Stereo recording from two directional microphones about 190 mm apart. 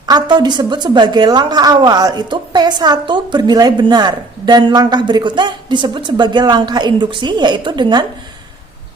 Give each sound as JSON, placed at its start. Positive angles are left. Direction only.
{"t": 0.0, "sound": "a woman's voice", "side_deg": -20}